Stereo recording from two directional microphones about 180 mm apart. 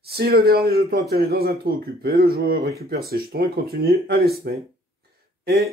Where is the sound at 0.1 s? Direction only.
55° right (ahead or behind).